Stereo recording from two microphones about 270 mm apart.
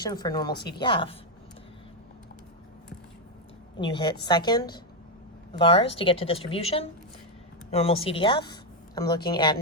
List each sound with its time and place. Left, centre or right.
0.0 s speech: centre
3.8 s speech: centre